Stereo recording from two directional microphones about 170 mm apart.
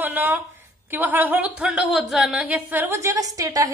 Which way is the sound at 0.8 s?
10° right (ahead or behind).